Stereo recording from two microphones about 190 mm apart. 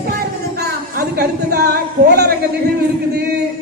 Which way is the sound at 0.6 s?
55° right (ahead or behind).